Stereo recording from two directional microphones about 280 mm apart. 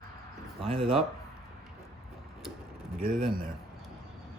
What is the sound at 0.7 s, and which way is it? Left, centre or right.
Speech, centre.